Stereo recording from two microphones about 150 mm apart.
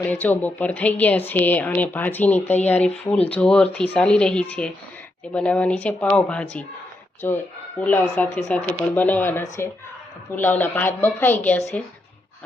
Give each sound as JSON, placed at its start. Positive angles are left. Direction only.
{"t": 0.0, "sound": "a woman's voice", "side_deg": 10}